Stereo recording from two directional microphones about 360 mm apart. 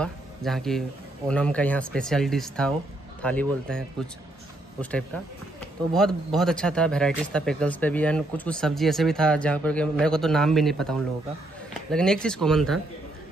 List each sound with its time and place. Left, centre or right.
0.0 s speech: centre
5.9 s speech: centre